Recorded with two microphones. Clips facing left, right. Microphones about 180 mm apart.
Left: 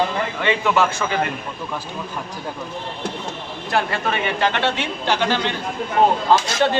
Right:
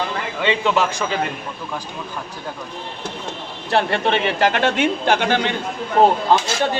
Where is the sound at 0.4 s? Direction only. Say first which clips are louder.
Right 1 dB; 20° right (ahead or behind).